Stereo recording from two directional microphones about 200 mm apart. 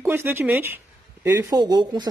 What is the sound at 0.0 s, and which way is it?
A man's voice, 10° right (ahead or behind).